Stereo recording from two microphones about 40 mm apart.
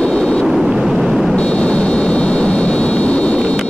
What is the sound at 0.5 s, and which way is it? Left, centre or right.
Vehicle, centre.